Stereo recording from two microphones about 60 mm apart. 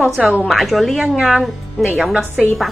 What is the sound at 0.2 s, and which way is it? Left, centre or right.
Speech, right.